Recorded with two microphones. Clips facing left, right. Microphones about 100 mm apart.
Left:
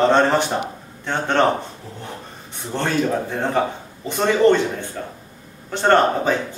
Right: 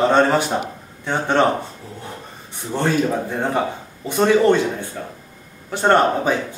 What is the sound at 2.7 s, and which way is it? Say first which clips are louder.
Speech: right 1 dB; 5° right (ahead or behind).